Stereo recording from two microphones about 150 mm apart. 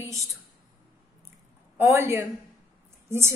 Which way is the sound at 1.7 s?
15° right (ahead or behind).